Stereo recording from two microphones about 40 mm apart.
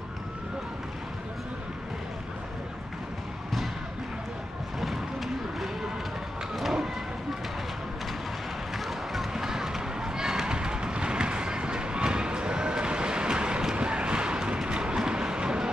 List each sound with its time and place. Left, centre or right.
4.7 s run: centre
6.5 s vehicle: centre
8.7 s run: centre; by 15.7 s right